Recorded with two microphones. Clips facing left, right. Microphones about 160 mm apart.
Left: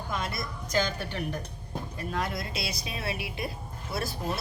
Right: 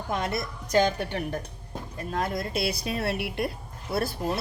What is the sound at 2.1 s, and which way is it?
A woman's voice, 45° right (ahead or behind).